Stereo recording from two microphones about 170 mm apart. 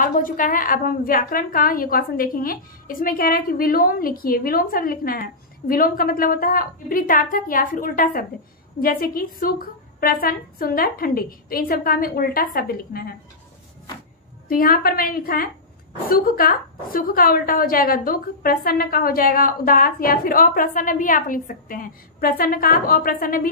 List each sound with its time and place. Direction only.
0.0 s a woman's voice: 50° left (ahead or behind)
14.5 s a woman's voice: 60° left (ahead or behind)